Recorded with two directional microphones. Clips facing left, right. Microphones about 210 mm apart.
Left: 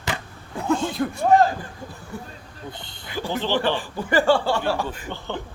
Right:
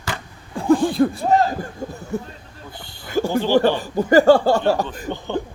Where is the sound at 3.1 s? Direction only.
45° right (ahead or behind).